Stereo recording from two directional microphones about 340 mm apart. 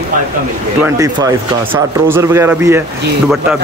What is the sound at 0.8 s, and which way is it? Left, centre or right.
Speech, centre.